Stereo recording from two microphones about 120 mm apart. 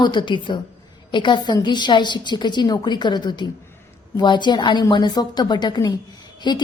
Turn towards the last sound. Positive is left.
turn(degrees=40)  # may be behind; listen again after turning